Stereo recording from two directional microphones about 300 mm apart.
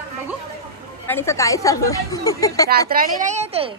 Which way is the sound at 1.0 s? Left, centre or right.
Centre.